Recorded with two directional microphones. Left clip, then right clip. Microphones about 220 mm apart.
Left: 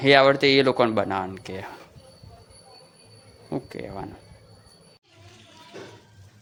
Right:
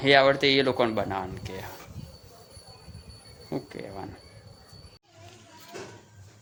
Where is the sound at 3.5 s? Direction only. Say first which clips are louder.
Left 3 dB; 15° left (ahead or behind).